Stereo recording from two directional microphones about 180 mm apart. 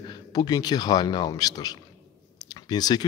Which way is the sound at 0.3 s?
20° left (ahead or behind).